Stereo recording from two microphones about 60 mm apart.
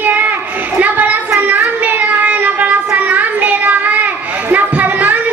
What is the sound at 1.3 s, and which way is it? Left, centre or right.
Child singing, right.